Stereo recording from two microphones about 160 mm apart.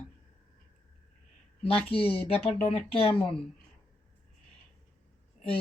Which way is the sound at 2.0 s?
10° left (ahead or behind).